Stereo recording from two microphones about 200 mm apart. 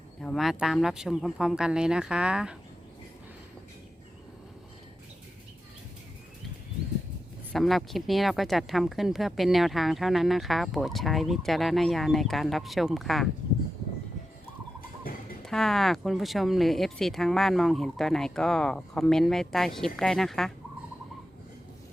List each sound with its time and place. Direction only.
0.2 s speech: centre (ahead or behind)
7.5 s speech: centre (ahead or behind)
14.8 s a sound: 45° left (ahead or behind)
15.4 s speech: centre (ahead or behind)